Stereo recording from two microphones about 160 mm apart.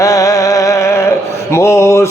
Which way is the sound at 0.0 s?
20° left (ahead or behind).